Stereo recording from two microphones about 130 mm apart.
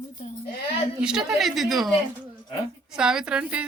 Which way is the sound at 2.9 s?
5° right (ahead or behind).